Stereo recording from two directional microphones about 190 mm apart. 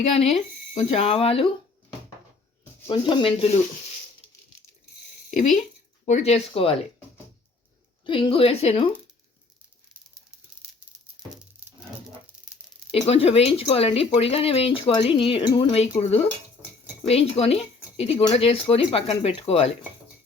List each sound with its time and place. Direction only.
0.3 s speech: 35° left (ahead or behind)
2.9 s a woman's voice: 25° left (ahead or behind)
6.1 s speech: 35° left (ahead or behind)
8.0 s a woman's voice: 25° left (ahead or behind)
11.6 s a sound: 5° right (ahead or behind)
12.9 s speech: 30° left (ahead or behind)